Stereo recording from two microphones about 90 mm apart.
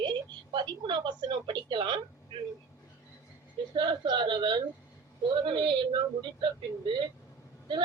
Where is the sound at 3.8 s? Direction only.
60° right (ahead or behind).